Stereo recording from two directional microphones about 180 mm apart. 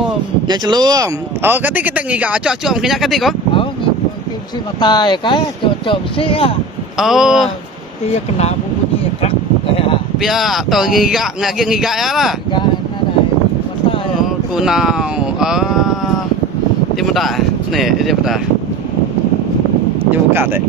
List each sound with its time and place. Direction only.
0.5 s speech: 25° right (ahead or behind); by 3.3 s centre (ahead or behind)
4.7 s speech: 25° left (ahead or behind)
7.0 s speech: centre (ahead or behind)
10.1 s speech: centre (ahead or behind)
14.6 s speech: 5° right (ahead or behind)
16.9 s speech: centre (ahead or behind)
20.1 s speech: 10° right (ahead or behind)